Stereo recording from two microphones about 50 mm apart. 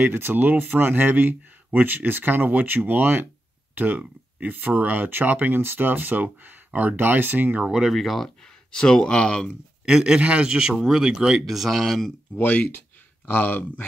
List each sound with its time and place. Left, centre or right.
0.0 s speech: right
7.7 s speech: centre
8.7 s speech: centre
9.8 s speech: centre
11.4 s speech: centre
13.2 s speech: left